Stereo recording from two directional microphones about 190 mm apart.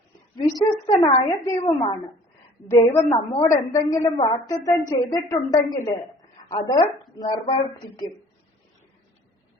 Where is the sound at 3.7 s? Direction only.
15° left (ahead or behind).